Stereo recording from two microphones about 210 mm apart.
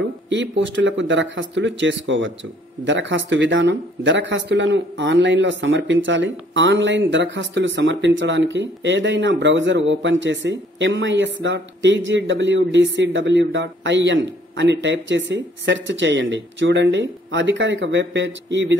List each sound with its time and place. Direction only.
0.3 s speech: 60° right (ahead or behind)